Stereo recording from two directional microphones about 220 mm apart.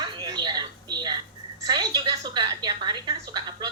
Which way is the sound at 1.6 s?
20° right (ahead or behind).